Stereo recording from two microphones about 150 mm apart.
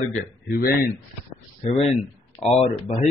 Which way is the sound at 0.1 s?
70° left (ahead or behind).